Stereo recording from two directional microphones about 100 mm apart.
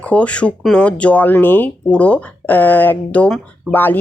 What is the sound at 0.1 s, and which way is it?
A man's voice, 10° left (ahead or behind).